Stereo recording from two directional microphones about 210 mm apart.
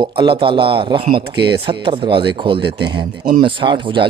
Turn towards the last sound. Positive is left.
turn(degrees=-25)  # may be behind; listen again after turning